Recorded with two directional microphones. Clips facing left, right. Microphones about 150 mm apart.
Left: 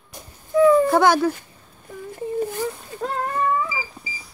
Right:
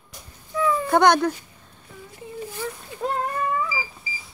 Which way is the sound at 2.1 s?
50° left (ahead or behind).